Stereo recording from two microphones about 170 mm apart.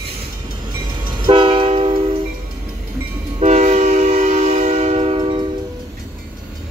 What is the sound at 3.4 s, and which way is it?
Train, 40° right (ahead or behind).